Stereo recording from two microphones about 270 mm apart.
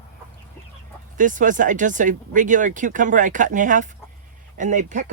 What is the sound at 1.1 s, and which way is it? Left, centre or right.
Speech, right.